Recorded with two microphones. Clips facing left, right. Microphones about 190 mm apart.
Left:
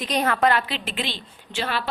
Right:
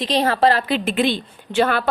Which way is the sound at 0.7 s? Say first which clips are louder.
Right 11 dB; 45° right (ahead or behind).